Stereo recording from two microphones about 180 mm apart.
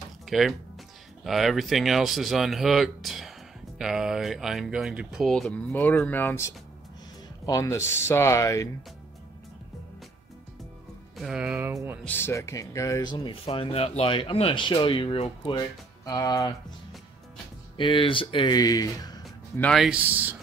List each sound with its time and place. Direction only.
0.2 s speech: centre (ahead or behind); by 8.6 s 15° left (ahead or behind)
11.1 s speech: 5° right (ahead or behind)
12.0 s speech: 10° left (ahead or behind); by 15.6 s 30° left (ahead or behind)
16.1 s speech: 20° left (ahead or behind)
17.7 s speech: 30° left (ahead or behind)
19.6 s speech: centre (ahead or behind)